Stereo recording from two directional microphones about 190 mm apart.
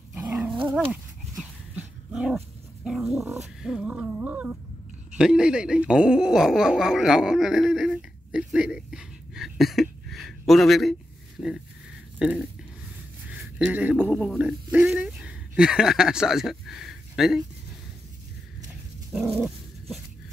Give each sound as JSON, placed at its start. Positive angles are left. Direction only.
{"t": 0.1, "sound": "dog", "side_deg": -15}
{"t": 1.3, "sound": "dog", "side_deg": 0}
{"t": 3.3, "sound": "a sound", "side_deg": -5}
{"t": 13.3, "sound": "speech", "side_deg": -10}